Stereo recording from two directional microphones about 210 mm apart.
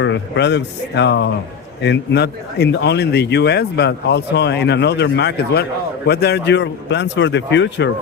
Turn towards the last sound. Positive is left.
turn(degrees=60)  # may be behind; listen again after turning